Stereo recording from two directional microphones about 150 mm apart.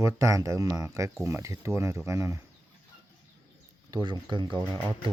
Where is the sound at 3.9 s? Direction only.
25° right (ahead or behind).